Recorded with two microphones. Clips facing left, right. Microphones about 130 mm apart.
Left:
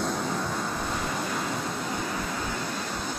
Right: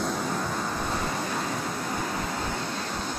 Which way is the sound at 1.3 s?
Centre (ahead or behind).